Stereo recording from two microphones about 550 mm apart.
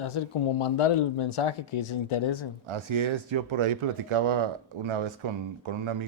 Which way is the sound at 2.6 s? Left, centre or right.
Right.